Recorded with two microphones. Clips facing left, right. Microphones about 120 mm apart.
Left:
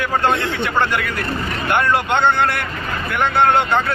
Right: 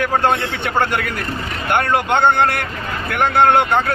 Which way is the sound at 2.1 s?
55° right (ahead or behind).